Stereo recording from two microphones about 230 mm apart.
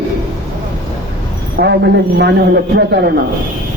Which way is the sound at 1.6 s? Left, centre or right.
Right.